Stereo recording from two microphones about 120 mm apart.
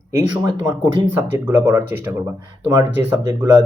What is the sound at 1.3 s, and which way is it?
Speech, 20° right (ahead or behind).